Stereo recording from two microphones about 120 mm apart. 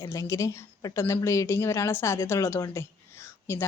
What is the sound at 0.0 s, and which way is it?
A woman's voice, 25° left (ahead or behind).